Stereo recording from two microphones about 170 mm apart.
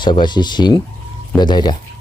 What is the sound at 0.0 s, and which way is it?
Speech, 25° left (ahead or behind).